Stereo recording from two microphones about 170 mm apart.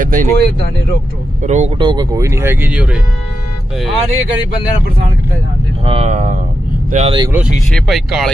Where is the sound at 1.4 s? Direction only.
45° right (ahead or behind).